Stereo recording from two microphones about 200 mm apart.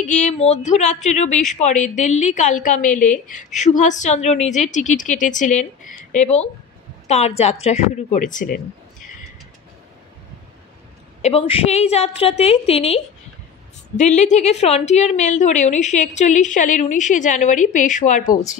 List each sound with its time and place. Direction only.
0.0 s a woman's voice: 35° left (ahead or behind)
11.2 s a woman's voice: 30° left (ahead or behind)